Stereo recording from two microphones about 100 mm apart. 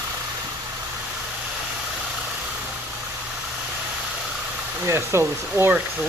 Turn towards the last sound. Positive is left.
turn(degrees=-25)  # may be behind; listen again after turning